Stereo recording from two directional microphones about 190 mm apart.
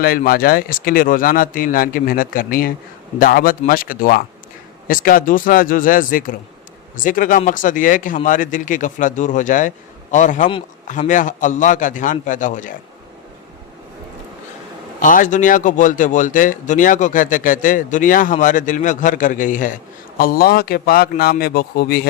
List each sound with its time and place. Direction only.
0.0 s speech: 50° left (ahead or behind)
15.0 s speech: 45° left (ahead or behind)